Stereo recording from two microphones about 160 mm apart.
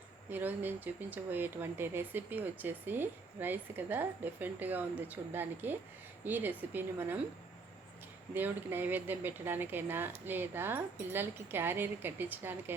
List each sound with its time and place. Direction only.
0.3 s speech: 10° right (ahead or behind)
8.3 s speech: 10° right (ahead or behind)